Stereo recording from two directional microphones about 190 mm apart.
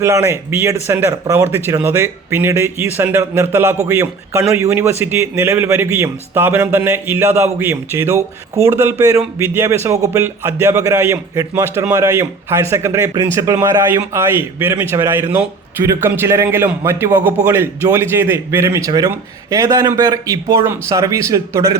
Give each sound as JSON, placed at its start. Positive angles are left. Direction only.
{"t": 0.0, "sound": "speech", "side_deg": -15}